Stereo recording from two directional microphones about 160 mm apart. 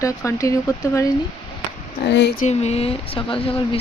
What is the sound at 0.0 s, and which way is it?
Speech, 20° left (ahead or behind).